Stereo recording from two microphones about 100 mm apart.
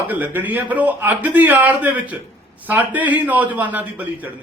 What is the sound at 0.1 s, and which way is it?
A man's voice, 15° right (ahead or behind).